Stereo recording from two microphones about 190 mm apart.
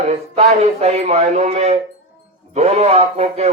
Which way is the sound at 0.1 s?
35° right (ahead or behind).